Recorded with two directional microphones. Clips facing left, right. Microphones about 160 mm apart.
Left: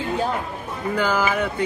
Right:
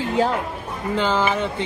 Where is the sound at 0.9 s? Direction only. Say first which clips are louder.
Right 1 dB; 25° right (ahead or behind).